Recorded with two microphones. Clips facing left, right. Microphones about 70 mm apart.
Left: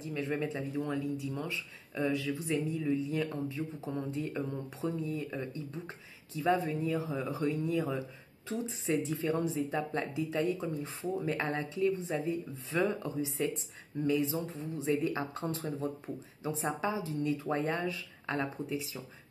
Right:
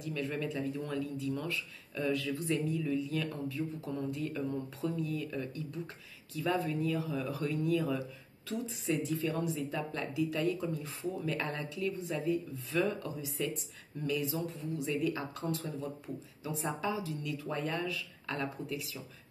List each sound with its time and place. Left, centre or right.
0.0 s speech: left